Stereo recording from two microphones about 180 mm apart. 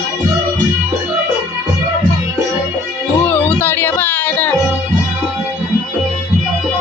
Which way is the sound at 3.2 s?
10° left (ahead or behind).